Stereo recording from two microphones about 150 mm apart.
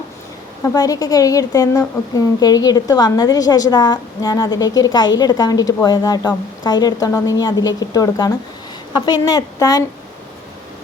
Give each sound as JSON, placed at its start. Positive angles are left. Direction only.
{"t": 0.6, "sound": "a woman's voice", "side_deg": 25}